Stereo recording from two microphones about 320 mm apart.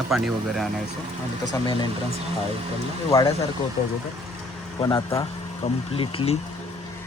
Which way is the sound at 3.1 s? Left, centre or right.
Centre.